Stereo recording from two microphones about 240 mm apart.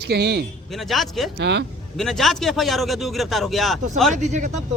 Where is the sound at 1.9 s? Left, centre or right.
Centre.